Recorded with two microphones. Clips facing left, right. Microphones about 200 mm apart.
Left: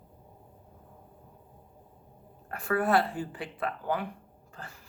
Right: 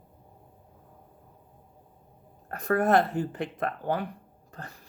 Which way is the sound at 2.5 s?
40° right (ahead or behind).